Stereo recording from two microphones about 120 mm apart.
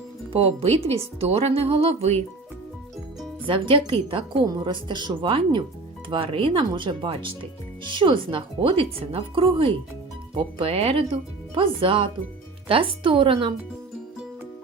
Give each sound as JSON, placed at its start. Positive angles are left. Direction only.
{"t": 0.9, "sound": "speech", "side_deg": -60}
{"t": 3.4, "sound": "speech", "side_deg": -45}